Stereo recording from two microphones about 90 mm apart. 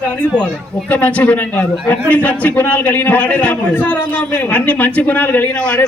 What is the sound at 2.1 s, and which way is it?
A man's voice, 15° left (ahead or behind).